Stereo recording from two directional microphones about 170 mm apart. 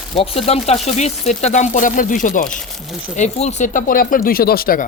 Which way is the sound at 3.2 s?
40° left (ahead or behind).